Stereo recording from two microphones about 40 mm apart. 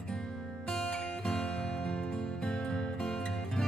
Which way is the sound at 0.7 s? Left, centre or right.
Centre.